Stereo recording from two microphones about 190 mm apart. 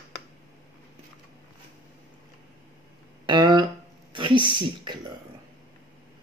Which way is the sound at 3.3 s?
25° right (ahead or behind).